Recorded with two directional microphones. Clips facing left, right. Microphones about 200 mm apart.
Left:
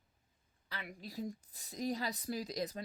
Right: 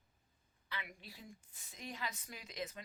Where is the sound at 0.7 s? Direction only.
40° left (ahead or behind).